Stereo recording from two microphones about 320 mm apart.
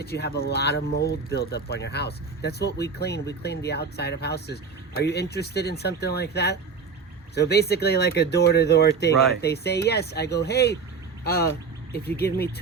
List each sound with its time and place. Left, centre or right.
0.0 s speech: left